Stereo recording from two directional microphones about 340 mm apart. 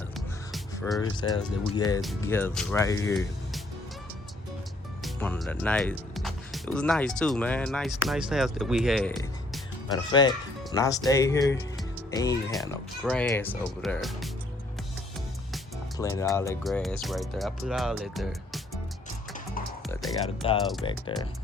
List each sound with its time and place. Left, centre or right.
0.5 s music: centre
1.0 s speech: centre
5.0 s speech: centre
9.9 s speech: centre
15.5 s speech: centre
19.9 s music: centre
20.4 s speech: centre